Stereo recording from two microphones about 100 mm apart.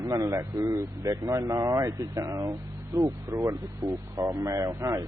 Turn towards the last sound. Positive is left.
turn(degrees=-30)  # may be behind; listen again after turning